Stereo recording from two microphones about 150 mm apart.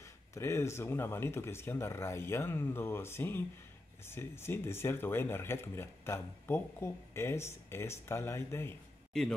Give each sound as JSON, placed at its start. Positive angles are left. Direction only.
{"t": 0.0, "sound": "speech", "side_deg": 20}